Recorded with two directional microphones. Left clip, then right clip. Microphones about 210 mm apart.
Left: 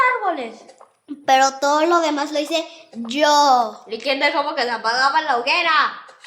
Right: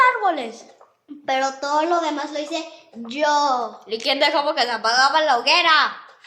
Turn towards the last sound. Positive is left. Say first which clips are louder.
# right 1 dB
turn(degrees=-35)  # may be behind; listen again after turning